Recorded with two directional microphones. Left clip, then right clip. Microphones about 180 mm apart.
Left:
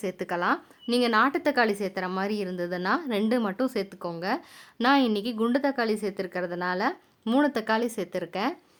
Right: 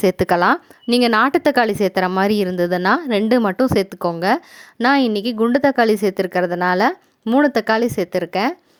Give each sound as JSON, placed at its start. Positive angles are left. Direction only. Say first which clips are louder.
{"t": 0.0, "sound": "a woman's voice", "louder": "right 13 dB", "side_deg": -45}